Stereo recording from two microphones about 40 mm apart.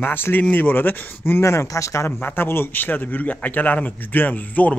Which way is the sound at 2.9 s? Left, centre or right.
Left.